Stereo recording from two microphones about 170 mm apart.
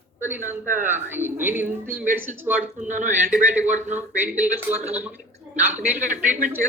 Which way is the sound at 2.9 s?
45° right (ahead or behind).